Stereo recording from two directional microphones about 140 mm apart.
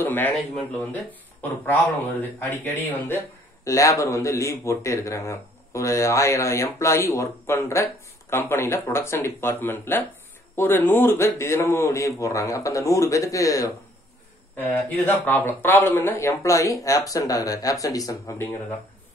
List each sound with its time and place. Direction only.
0.0 s a man's voice: 15° left (ahead or behind)
2.5 s speech: 15° left (ahead or behind)
14.6 s speech: 10° left (ahead or behind)